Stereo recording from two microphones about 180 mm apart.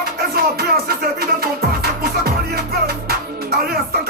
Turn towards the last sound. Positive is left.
turn(degrees=-60)  # may be behind; listen again after turning